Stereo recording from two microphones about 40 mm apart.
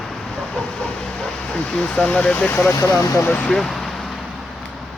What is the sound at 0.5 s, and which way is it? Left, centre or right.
Train, centre.